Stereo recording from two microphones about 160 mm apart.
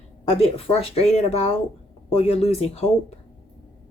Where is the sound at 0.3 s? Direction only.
35° left (ahead or behind).